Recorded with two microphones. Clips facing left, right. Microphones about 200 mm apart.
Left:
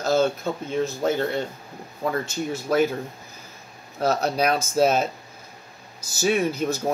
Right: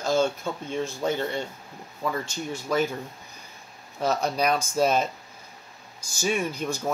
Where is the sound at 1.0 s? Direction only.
45° left (ahead or behind).